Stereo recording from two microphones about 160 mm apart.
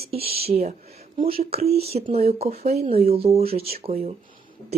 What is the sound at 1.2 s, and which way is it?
Speech, 35° right (ahead or behind).